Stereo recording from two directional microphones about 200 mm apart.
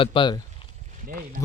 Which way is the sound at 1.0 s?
45° right (ahead or behind).